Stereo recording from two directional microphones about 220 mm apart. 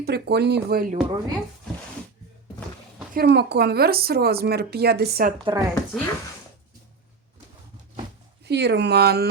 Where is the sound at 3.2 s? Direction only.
50° right (ahead or behind).